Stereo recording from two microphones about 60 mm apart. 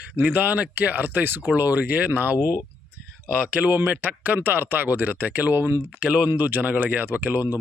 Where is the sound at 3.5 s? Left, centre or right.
Right.